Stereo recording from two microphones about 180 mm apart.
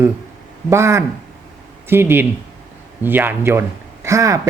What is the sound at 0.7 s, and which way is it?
A man's voice, 15° right (ahead or behind).